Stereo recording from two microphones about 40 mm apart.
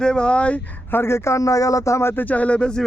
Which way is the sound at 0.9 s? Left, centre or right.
Left.